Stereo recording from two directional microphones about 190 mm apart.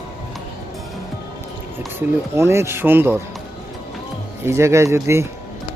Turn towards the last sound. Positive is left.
turn(degrees=-15)  # may be behind; listen again after turning